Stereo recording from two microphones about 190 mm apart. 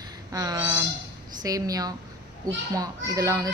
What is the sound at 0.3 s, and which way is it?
A woman's voice, 15° right (ahead or behind).